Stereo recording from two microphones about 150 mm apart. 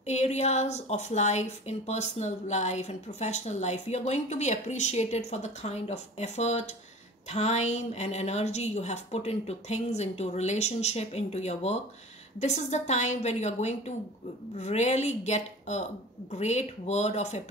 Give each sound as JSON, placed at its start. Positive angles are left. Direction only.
{"t": 0.0, "sound": "a woman's voice", "side_deg": 50}